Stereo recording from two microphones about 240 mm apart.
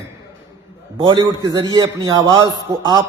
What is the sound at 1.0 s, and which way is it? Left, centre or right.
A man's voice, centre.